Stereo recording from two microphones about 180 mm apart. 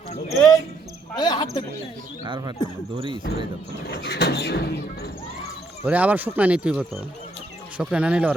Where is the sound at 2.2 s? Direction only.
25° right (ahead or behind).